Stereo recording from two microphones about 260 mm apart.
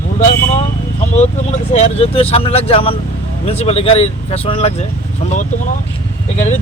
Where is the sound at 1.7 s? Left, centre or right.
Left.